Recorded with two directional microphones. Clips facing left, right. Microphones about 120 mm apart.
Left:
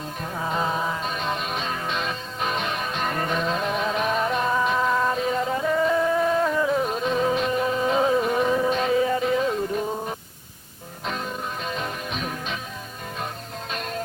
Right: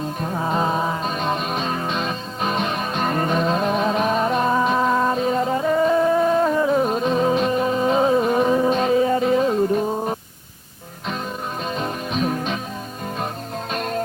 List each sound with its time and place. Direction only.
0.2 s music: 35° right (ahead or behind)
11.6 s music: 35° right (ahead or behind)
13.7 s music: 45° right (ahead or behind)